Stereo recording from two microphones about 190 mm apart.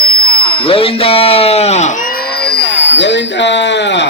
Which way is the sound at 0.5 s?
30° left (ahead or behind).